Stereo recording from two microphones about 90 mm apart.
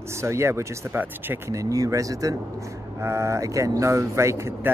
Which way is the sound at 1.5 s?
40° right (ahead or behind).